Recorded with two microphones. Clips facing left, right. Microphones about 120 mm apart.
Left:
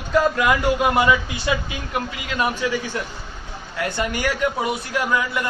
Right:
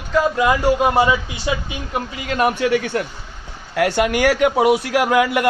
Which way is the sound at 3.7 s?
85° right.